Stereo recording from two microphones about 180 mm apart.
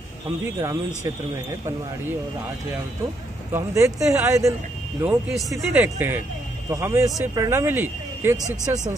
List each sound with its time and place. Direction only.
0.6 s speech: 15° right (ahead or behind)
3.5 s speech: 15° right (ahead or behind)
5.0 s speech: 5° right (ahead or behind)